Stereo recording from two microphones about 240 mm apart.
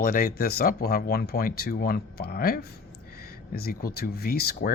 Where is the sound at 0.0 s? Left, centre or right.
Left.